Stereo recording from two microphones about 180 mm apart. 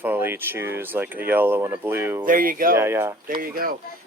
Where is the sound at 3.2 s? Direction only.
55° right (ahead or behind).